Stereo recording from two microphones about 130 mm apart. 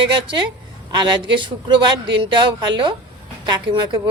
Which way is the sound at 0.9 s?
35° right (ahead or behind).